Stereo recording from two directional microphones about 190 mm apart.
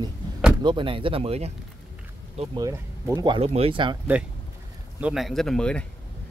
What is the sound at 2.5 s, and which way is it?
Speech, 15° right (ahead or behind).